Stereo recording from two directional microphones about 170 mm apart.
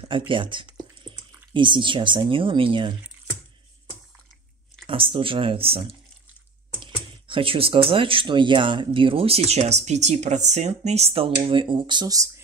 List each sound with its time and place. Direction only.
0.3 s speech: 30° right (ahead or behind)
4.8 s speech: 30° right (ahead or behind)